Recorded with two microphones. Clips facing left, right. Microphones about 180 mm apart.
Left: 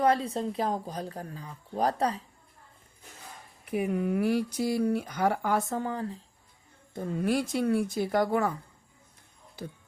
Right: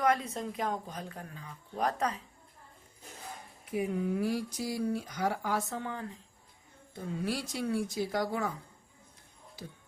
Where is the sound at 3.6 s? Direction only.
65° left (ahead or behind); by 6.2 s 35° left (ahead or behind).